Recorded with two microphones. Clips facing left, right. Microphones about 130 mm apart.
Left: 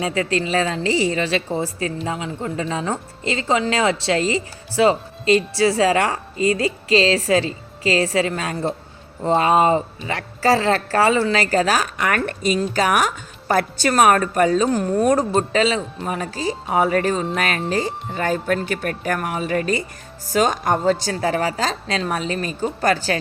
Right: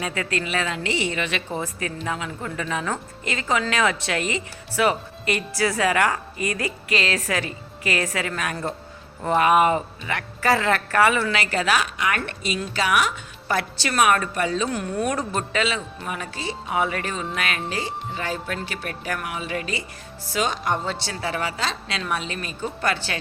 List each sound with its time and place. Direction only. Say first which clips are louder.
0.0 s a woman's voice: left 6 dB; 30° left (ahead or behind)